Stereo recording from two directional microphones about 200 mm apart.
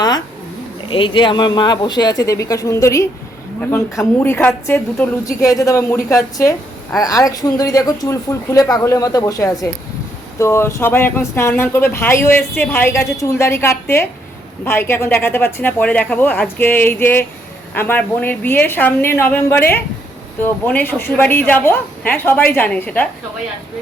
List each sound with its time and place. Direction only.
0.9 s speech: 25° left (ahead or behind); by 23.0 s 10° left (ahead or behind)